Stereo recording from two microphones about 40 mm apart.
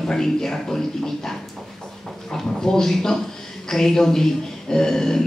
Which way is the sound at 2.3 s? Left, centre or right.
Centre.